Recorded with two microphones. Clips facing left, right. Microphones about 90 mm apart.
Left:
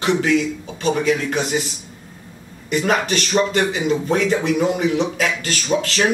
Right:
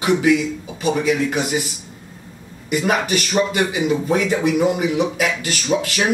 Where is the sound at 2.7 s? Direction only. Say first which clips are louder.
Even; 10° right (ahead or behind).